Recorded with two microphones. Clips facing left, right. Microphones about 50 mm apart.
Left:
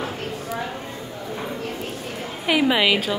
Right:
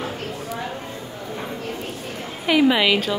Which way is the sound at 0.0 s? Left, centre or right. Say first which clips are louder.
Even; centre.